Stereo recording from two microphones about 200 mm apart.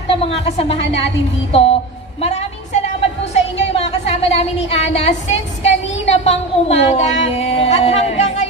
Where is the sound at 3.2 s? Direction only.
30° left (ahead or behind).